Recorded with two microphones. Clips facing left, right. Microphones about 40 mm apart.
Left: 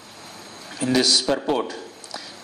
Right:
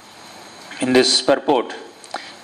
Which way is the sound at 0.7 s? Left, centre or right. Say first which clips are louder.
Right 5 dB; right.